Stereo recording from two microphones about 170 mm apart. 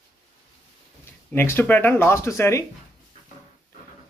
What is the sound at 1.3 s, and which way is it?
Speech, 15° left (ahead or behind).